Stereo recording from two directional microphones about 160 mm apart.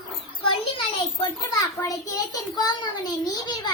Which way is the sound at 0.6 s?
35° left (ahead or behind).